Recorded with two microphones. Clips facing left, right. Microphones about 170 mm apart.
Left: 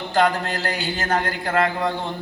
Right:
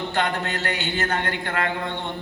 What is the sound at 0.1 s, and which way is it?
A man's voice, 35° left (ahead or behind).